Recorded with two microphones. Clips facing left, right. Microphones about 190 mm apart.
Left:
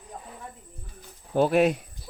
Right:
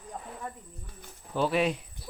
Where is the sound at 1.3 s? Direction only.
50° left (ahead or behind).